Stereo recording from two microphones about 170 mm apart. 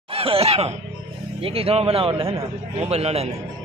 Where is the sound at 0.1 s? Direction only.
35° right (ahead or behind).